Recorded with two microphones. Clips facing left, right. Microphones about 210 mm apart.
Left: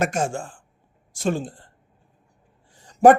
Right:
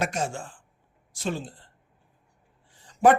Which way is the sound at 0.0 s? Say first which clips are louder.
Left 5 dB; 50° left (ahead or behind).